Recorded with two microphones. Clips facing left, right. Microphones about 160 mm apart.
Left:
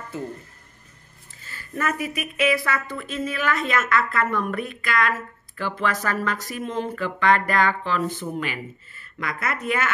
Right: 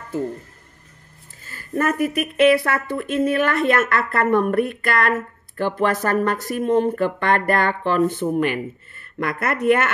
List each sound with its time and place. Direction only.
1.4 s speech: 45° right (ahead or behind)